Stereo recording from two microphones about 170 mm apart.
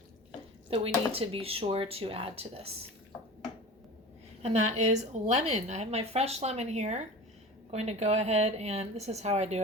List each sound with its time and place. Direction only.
0.7 s a woman's voice: 35° right (ahead or behind)
4.4 s a woman's voice: 40° right (ahead or behind)